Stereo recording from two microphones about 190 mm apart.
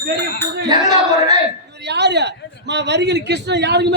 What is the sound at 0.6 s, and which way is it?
Speech, 20° right (ahead or behind).